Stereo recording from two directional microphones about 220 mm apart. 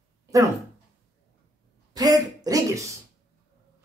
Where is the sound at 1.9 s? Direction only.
15° right (ahead or behind).